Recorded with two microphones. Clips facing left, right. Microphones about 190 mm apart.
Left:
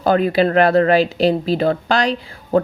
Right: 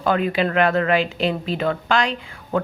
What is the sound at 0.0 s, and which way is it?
Speech, 35° left (ahead or behind).